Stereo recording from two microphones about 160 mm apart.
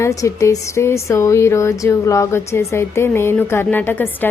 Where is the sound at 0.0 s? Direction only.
20° left (ahead or behind).